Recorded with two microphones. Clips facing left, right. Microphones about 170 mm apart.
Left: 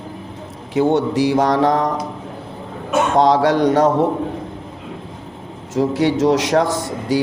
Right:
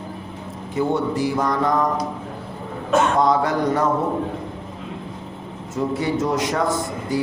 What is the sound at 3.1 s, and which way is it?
Speech, 90° left.